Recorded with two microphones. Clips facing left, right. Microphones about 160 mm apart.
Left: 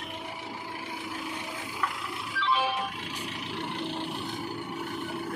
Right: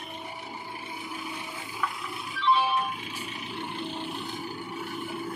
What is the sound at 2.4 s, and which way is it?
Music, 90° left.